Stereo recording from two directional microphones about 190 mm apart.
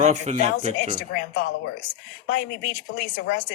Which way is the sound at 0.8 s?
50° left (ahead or behind).